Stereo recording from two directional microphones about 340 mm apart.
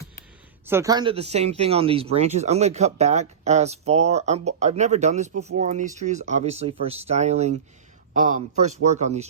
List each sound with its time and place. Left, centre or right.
0.6 s speech: centre